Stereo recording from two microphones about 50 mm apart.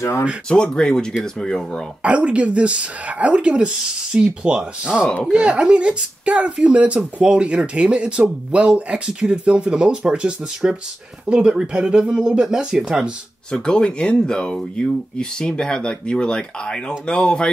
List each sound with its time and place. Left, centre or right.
0.5 s speech: centre
2.0 s speech: right
13.5 s speech: centre